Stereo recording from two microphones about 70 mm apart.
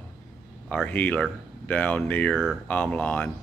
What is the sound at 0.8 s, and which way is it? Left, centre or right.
Speech, left.